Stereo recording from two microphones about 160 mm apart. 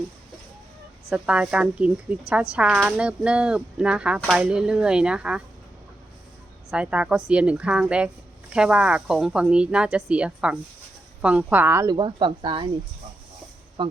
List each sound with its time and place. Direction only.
1.1 s speech: 5° right (ahead or behind)
6.7 s speech: 5° right (ahead or behind); by 12.6 s 30° right (ahead or behind)
13.8 s speech: 30° right (ahead or behind)